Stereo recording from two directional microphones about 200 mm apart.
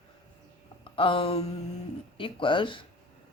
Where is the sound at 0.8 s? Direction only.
25° left (ahead or behind).